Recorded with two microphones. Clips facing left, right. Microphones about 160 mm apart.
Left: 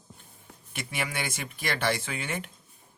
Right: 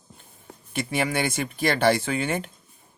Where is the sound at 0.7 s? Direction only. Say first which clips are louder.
Right 9 dB; 35° right (ahead or behind).